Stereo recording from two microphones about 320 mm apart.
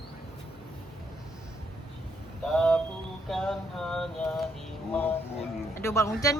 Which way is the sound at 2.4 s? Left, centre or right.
Centre.